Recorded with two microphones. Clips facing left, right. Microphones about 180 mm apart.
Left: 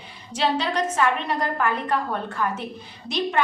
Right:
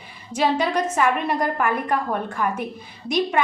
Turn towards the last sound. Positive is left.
turn(degrees=-10)  # may be behind; listen again after turning